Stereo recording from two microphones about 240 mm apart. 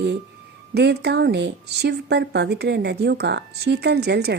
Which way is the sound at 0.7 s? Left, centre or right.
Right.